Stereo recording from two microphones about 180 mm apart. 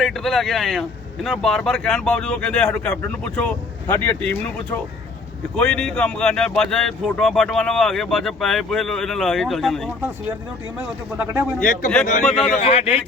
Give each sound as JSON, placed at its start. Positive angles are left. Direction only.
{"t": 0.0, "sound": "speech", "side_deg": 0}
{"t": 10.8, "sound": "speech", "side_deg": -10}
{"t": 11.6, "sound": "a man's voice", "side_deg": 45}
{"t": 12.2, "sound": "speech", "side_deg": 0}
{"t": 12.5, "sound": "a man's voice", "side_deg": 35}